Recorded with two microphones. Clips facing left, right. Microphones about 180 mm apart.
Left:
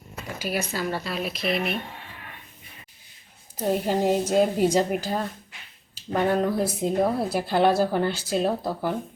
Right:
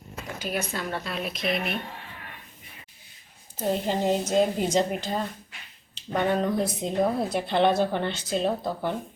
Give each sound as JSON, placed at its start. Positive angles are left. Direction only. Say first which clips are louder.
{"t": 0.3, "sound": "speech", "louder": "left 2 dB", "side_deg": 5}
{"t": 3.6, "sound": "speech", "louder": "left 2 dB", "side_deg": 10}